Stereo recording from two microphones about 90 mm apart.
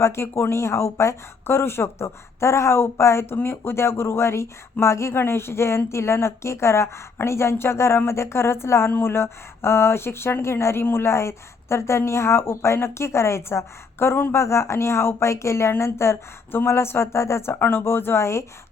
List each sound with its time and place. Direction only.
0.0 s speech: 30° left (ahead or behind)